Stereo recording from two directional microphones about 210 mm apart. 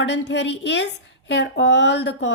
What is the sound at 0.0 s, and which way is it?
A woman's voice, 55° left (ahead or behind).